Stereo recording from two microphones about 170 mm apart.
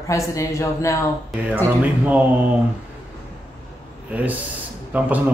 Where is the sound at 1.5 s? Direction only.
10° right (ahead or behind).